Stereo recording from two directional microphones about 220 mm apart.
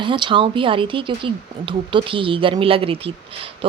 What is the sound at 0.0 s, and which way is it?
Speech, 20° right (ahead or behind).